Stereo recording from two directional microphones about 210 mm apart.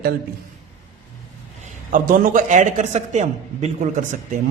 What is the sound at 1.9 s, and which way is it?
A man's voice, 40° right (ahead or behind).